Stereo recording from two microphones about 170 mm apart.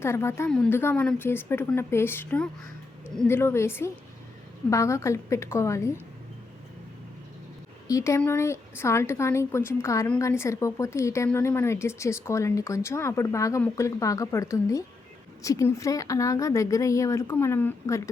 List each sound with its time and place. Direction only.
0.0 s speech: 15° left (ahead or behind)
0.5 s a woman's voice: 5° left (ahead or behind)
7.9 s speech: 20° left (ahead or behind)